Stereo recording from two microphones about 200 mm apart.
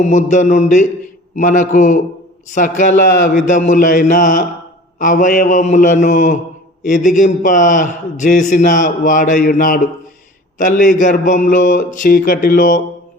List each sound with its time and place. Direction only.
0.0 s a man's voice: 35° left (ahead or behind)